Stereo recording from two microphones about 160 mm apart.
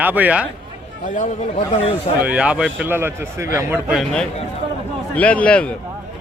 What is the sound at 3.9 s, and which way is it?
A man's voice, 5° left (ahead or behind).